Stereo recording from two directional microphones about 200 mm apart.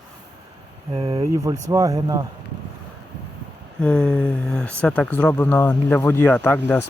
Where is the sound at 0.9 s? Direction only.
25° right (ahead or behind).